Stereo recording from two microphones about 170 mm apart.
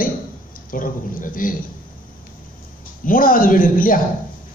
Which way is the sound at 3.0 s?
55° left (ahead or behind).